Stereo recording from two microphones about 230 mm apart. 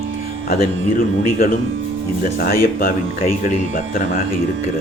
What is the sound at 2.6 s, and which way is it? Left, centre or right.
Speech, left.